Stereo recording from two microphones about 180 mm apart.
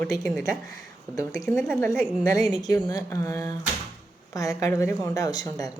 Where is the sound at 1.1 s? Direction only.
20° left (ahead or behind).